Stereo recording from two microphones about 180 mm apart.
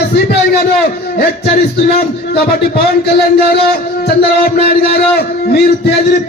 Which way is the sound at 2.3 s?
60° left (ahead or behind).